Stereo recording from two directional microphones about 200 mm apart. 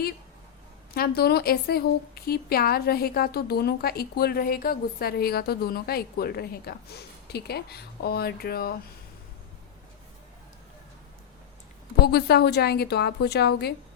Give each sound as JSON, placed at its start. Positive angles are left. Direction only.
{"t": 0.9, "sound": "a woman's voice", "side_deg": 55}
{"t": 12.0, "sound": "a woman's voice", "side_deg": 55}